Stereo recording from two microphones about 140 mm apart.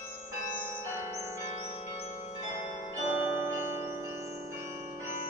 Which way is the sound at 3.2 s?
20° right (ahead or behind).